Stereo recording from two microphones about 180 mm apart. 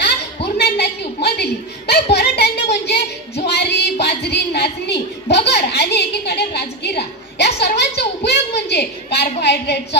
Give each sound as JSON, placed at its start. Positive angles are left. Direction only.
{"t": 0.6, "sound": "a sound", "side_deg": 65}
{"t": 3.4, "sound": "music", "side_deg": 65}
{"t": 4.0, "sound": "a woman's voice", "side_deg": 65}